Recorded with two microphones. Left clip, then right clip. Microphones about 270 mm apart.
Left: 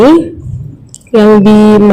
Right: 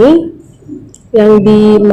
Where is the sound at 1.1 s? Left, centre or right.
Left.